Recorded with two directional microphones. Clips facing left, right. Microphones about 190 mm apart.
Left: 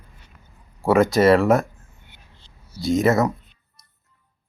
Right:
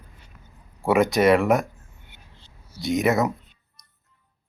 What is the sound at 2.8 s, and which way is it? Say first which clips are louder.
Speech: left 3 dB; 20° right (ahead or behind).